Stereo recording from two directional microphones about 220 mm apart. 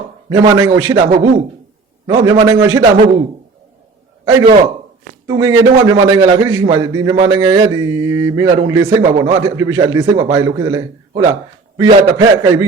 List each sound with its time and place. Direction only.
0.3 s speech: 15° right (ahead or behind)
5.2 s speech: 15° right (ahead or behind)